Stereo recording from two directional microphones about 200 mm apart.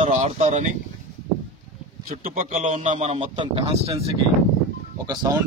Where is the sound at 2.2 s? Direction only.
40° right (ahead or behind).